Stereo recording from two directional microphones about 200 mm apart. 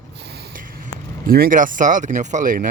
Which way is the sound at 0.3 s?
55° right (ahead or behind).